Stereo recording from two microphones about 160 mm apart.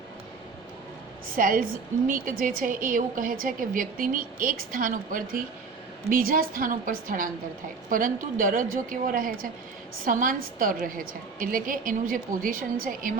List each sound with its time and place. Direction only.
1.4 s a woman's voice: 60° right (ahead or behind)